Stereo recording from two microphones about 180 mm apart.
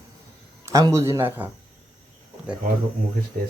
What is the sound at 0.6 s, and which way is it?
Speech, 15° right (ahead or behind).